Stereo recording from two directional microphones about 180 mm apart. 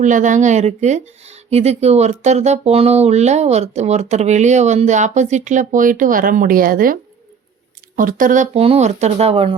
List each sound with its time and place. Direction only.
0.0 s speech: 45° right (ahead or behind)